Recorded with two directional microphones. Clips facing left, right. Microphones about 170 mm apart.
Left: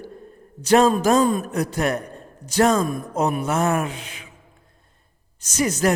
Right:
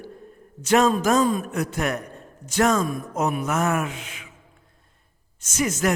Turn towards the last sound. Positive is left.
turn(degrees=35)  # may be behind; listen again after turning